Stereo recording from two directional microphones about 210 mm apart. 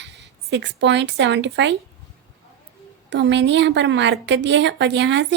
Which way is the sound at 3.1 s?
55° right (ahead or behind).